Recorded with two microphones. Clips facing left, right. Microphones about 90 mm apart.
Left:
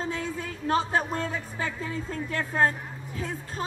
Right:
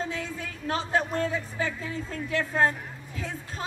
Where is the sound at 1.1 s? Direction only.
35° left (ahead or behind).